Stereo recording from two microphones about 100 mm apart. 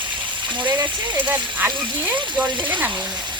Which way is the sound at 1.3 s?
15° right (ahead or behind).